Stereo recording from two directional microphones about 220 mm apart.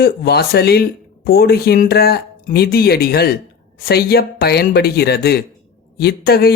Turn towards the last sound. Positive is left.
turn(degrees=45)  # may be behind; listen again after turning